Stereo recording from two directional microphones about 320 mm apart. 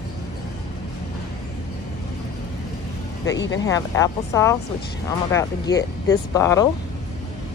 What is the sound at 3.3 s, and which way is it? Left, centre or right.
Speech, left.